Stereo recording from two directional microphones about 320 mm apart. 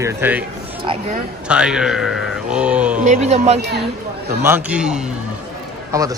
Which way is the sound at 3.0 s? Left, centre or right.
Right.